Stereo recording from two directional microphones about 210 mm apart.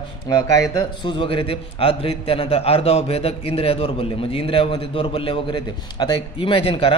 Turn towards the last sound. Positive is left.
turn(degrees=25)  # may be behind; listen again after turning